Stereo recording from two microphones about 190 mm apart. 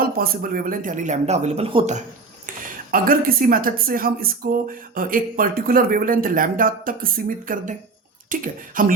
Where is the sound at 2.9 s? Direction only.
50° right (ahead or behind).